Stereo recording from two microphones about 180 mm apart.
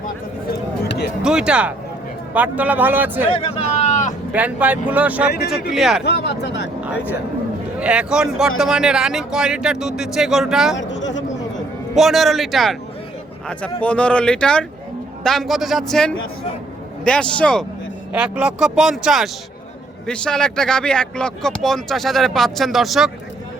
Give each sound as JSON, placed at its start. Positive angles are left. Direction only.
{"t": 1.2, "sound": "speech", "side_deg": -5}
{"t": 3.3, "sound": "a sound", "side_deg": 35}
{"t": 4.3, "sound": "speech", "side_deg": -10}
{"t": 6.1, "sound": "speech", "side_deg": 70}
{"t": 6.8, "sound": "speech", "side_deg": -10}
{"t": 10.8, "sound": "a sound", "side_deg": 85}
{"t": 11.9, "sound": "speech", "side_deg": 0}
{"t": 13.8, "sound": "speech", "side_deg": 5}
{"t": 18.1, "sound": "speech", "side_deg": -5}